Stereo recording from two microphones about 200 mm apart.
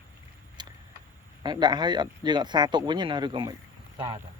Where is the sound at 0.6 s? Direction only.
20° right (ahead or behind).